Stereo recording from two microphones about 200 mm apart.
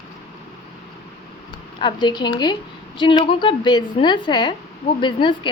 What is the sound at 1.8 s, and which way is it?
A woman's voice, 25° left (ahead or behind).